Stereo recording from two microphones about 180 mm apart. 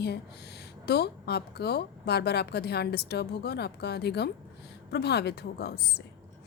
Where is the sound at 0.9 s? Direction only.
65° left (ahead or behind).